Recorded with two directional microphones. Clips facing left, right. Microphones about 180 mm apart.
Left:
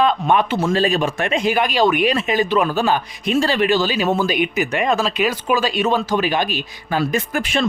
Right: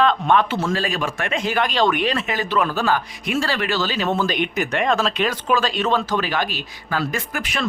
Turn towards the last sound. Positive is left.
turn(degrees=30)  # may be behind; listen again after turning